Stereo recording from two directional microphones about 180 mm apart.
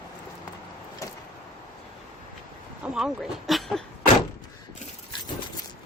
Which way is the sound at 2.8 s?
5° right (ahead or behind).